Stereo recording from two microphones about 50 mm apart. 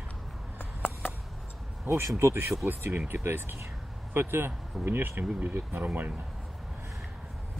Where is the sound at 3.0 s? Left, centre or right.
Right.